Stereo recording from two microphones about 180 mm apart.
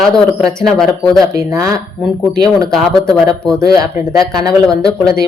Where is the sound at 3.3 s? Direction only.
20° right (ahead or behind).